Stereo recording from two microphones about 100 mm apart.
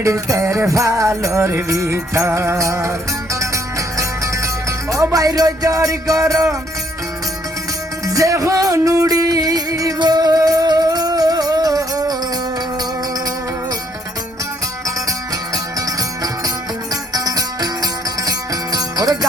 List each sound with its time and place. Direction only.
0.0 s music: 30° right (ahead or behind)
8.0 s music: 35° right (ahead or behind)
15.5 s music: 35° right (ahead or behind)